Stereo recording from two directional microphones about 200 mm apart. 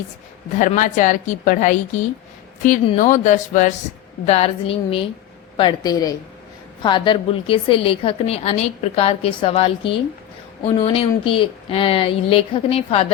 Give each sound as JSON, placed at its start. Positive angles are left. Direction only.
{"t": 0.6, "sound": "a woman's voice", "side_deg": 40}